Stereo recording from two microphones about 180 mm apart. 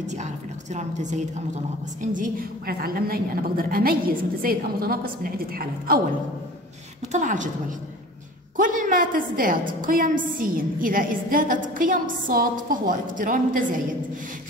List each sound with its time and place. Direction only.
0.0 s a woman's voice: 40° right (ahead or behind)
2.0 s a woman's voice: 50° right (ahead or behind)
7.1 s a woman's voice: 45° right (ahead or behind)
8.5 s a woman's voice: 50° right (ahead or behind)